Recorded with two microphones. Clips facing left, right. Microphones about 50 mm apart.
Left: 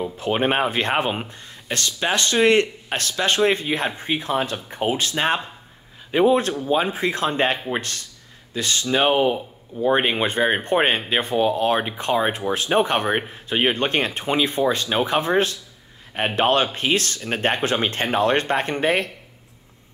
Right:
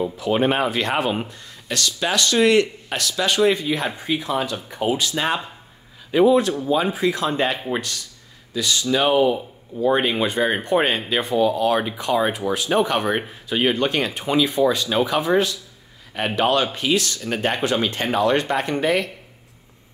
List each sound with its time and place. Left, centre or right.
0.2 s speech: left